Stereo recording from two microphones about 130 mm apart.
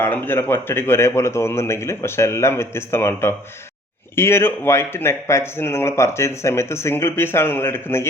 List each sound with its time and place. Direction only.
0.0 s speech: 15° left (ahead or behind)